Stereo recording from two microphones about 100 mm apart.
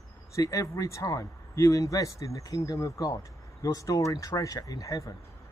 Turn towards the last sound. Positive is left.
turn(degrees=35)  # may be behind; listen again after turning